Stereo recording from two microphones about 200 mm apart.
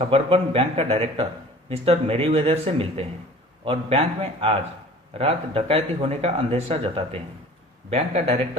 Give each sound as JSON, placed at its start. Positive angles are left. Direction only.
{"t": 0.0, "sound": "speech", "side_deg": -30}